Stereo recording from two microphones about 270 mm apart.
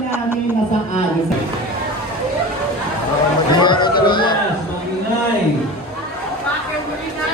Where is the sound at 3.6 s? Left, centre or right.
Centre.